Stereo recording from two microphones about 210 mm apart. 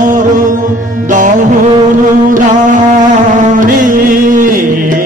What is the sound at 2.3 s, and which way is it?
Music, 35° right (ahead or behind).